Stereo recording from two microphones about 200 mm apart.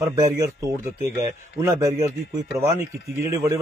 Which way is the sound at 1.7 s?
15° right (ahead or behind).